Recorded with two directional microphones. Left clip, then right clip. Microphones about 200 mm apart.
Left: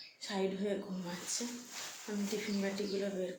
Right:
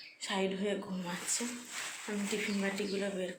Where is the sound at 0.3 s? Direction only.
Centre (ahead or behind).